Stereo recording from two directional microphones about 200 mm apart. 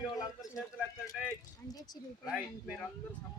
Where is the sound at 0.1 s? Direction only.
20° left (ahead or behind).